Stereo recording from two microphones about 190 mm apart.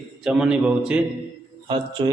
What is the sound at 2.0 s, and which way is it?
Speech, 25° right (ahead or behind).